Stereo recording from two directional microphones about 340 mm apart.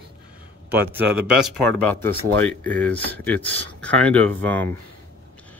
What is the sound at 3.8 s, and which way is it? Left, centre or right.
Speech, centre.